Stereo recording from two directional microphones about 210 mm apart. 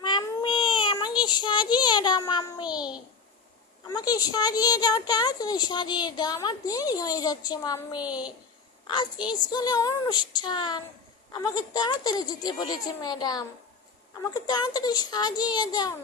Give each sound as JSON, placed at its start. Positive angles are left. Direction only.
{"t": 0.0, "sound": "child singing", "side_deg": 20}
{"t": 2.7, "sound": "a sound", "side_deg": -5}
{"t": 3.9, "sound": "a woman's voice", "side_deg": 20}